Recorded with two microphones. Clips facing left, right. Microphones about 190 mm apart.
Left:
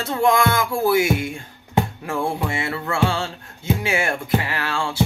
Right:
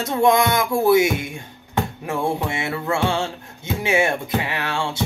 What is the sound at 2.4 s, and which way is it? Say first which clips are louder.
Music: right 1 dB; 20° right (ahead or behind).